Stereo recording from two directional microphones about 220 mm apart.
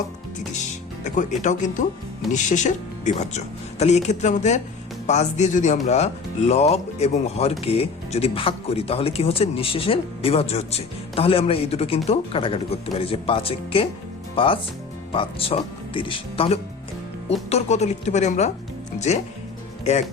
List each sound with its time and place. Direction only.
1.0 s speech: 35° left (ahead or behind)